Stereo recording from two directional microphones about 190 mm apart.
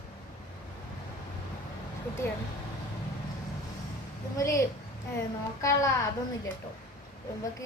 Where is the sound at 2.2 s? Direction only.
15° left (ahead or behind).